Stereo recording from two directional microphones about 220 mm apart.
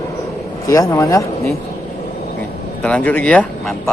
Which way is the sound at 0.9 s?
15° left (ahead or behind).